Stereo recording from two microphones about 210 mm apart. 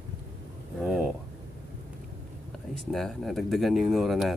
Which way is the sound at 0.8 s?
Centre (ahead or behind).